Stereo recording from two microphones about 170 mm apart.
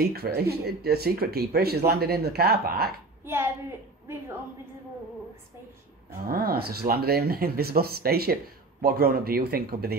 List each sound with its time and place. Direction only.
0.0 s speech: 65° right (ahead or behind)
6.2 s speech: 60° right (ahead or behind)